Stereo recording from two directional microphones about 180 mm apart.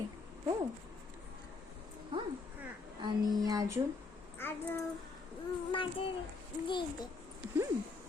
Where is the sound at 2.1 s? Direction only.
30° right (ahead or behind).